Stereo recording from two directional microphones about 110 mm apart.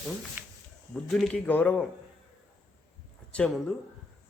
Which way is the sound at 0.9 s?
5° left (ahead or behind).